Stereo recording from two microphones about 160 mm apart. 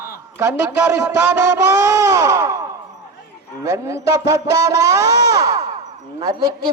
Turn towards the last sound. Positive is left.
turn(degrees=-25)  # may be behind; listen again after turning